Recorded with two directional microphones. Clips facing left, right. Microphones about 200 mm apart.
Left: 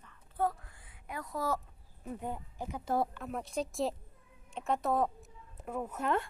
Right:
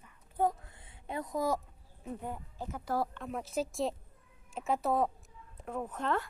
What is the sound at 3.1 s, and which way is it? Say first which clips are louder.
A woman's voice: right 1 dB; centre (ahead or behind).